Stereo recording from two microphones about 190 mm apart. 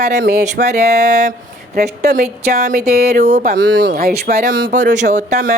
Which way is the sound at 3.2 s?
35° right (ahead or behind).